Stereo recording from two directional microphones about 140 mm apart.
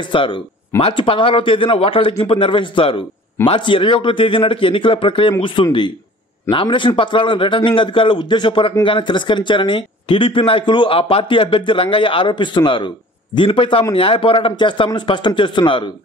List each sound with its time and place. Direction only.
0.1 s speech: 35° left (ahead or behind)